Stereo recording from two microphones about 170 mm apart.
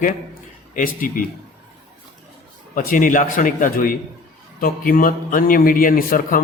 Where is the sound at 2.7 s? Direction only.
55° left (ahead or behind).